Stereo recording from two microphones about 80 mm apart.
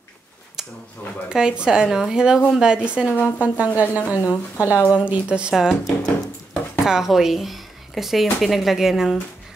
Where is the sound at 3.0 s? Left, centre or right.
Left.